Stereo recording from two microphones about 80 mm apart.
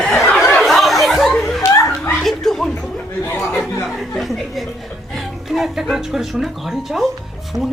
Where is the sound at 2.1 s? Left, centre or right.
Centre.